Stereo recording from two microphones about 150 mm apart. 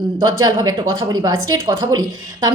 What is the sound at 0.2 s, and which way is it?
A woman's voice, 30° right (ahead or behind).